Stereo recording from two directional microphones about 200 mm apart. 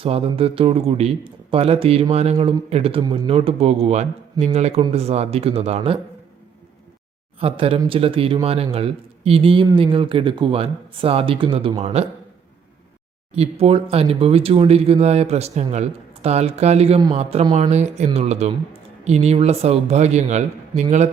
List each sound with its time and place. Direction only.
0.0 s a man's voice: 30° right (ahead or behind)
7.3 s a man's voice: 30° right (ahead or behind)
13.3 s speech: 30° right (ahead or behind)